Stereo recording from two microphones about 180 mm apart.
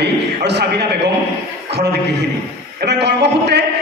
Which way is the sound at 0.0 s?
70° right (ahead or behind).